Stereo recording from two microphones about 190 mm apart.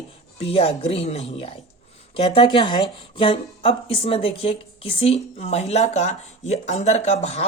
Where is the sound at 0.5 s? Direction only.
30° left (ahead or behind).